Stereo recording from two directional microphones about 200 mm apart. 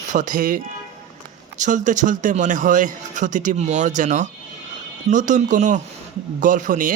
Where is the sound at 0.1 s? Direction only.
40° right (ahead or behind).